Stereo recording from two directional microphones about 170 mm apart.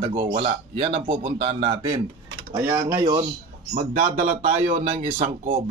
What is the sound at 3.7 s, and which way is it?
A man's voice, 45° right (ahead or behind).